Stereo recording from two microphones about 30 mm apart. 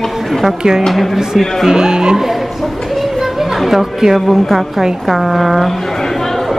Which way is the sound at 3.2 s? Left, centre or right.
Centre.